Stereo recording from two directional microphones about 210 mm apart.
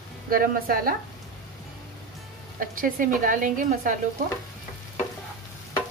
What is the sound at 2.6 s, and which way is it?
A woman's voice, 40° right (ahead or behind).